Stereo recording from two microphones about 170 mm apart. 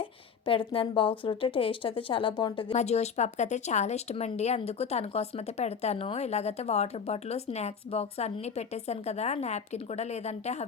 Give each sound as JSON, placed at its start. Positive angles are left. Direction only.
{"t": 0.0, "sound": "a woman's voice", "side_deg": 30}